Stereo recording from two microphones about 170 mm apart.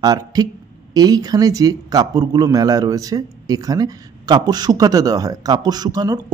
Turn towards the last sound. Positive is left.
turn(degrees=-25)  # may be behind; listen again after turning